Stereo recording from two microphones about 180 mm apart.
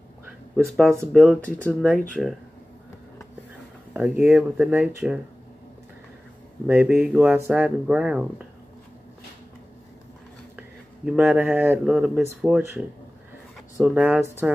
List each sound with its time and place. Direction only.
0.7 s speech: centre (ahead or behind)
3.9 s speech: 5° right (ahead or behind)
6.7 s speech: 5° right (ahead or behind)
11.1 s speech: 5° right (ahead or behind)